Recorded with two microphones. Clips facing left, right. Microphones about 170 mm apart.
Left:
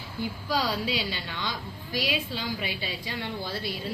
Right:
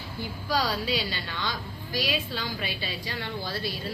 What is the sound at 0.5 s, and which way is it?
A woman's voice, 15° left (ahead or behind).